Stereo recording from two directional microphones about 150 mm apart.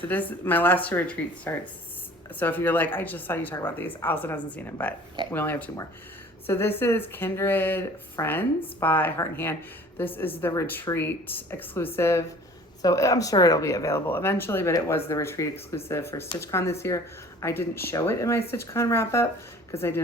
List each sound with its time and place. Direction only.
0.1 s speech: 10° left (ahead or behind)